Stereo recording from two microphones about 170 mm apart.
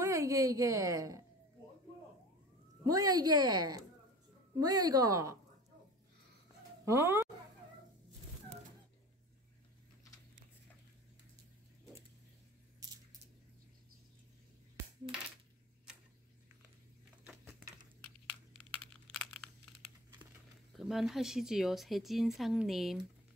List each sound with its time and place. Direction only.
0.0 s a woman's voice: 15° right (ahead or behind)
2.8 s a woman's voice: 20° right (ahead or behind)
6.9 s speech: 15° right (ahead or behind)
12.8 s a sound: 20° right (ahead or behind)
17.3 s a sound: 5° right (ahead or behind)
18.5 s computer keyboard: 5° left (ahead or behind)
20.7 s speech: centre (ahead or behind)